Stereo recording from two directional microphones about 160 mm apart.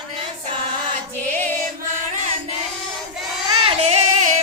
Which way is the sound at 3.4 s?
35° right (ahead or behind).